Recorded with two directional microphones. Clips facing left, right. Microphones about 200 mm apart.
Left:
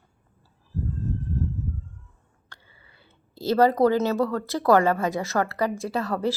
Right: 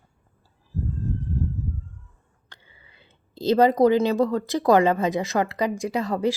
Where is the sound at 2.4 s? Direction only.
20° right (ahead or behind).